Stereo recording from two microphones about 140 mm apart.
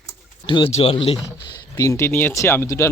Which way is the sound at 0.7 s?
45° left (ahead or behind).